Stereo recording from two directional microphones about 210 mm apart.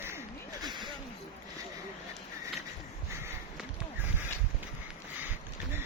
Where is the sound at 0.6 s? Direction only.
20° right (ahead or behind).